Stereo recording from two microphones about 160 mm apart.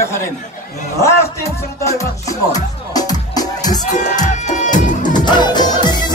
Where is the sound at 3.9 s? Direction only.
50° left (ahead or behind).